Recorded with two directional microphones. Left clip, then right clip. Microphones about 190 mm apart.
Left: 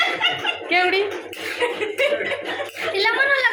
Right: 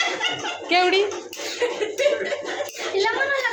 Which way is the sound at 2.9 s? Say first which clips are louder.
Left 3 dB; 5° right (ahead or behind).